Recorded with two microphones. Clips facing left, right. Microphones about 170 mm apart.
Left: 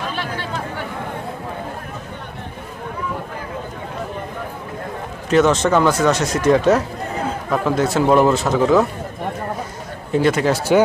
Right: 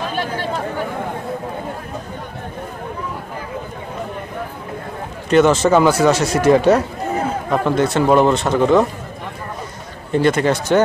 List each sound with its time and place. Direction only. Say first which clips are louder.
0.1 s chatter: right 4 dB; 45° right (ahead or behind)
5.3 s speech: right 2 dB; centre (ahead or behind)
10.1 s speech: right 1 dB; 5° left (ahead or behind)